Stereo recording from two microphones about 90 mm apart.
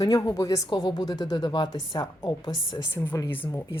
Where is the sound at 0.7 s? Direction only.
60° left (ahead or behind).